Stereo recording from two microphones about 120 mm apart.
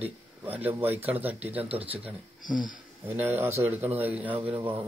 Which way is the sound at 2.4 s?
90° left.